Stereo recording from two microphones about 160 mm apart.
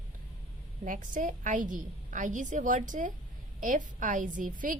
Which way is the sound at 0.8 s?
55° right (ahead or behind).